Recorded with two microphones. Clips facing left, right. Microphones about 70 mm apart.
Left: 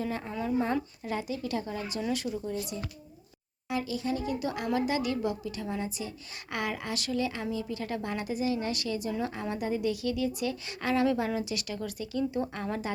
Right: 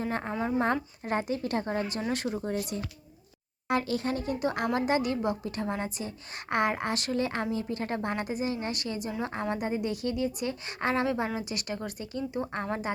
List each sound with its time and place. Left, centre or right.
0.0 s speech: right